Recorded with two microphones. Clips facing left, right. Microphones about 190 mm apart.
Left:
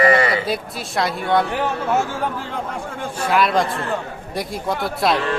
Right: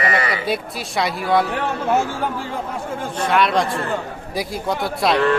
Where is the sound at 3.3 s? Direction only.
Centre (ahead or behind).